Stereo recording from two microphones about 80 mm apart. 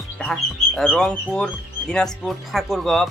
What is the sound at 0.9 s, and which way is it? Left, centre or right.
Speech, centre.